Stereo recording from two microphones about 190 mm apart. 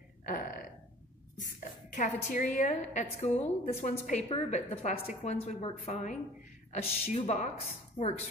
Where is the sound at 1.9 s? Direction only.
40° left (ahead or behind).